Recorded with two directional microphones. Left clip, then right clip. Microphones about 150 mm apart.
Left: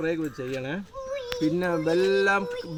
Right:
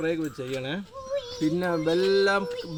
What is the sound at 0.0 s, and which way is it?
Speech, centre (ahead or behind).